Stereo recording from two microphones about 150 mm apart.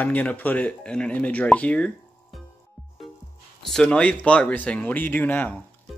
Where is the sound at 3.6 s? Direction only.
5° left (ahead or behind).